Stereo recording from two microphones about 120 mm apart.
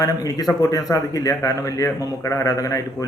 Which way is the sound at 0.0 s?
30° left (ahead or behind).